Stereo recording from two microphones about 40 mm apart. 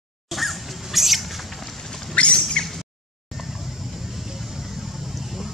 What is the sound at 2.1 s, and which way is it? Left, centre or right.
Bird, left.